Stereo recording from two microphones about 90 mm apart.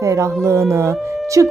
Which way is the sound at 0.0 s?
35° right (ahead or behind).